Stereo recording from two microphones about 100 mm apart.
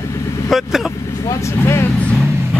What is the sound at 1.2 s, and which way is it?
Speech, 30° left (ahead or behind).